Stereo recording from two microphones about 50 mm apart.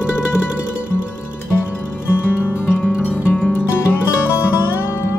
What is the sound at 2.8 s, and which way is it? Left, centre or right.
Music, left.